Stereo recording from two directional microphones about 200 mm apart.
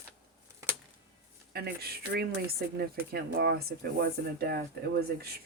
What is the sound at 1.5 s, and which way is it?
Speech, 50° right (ahead or behind).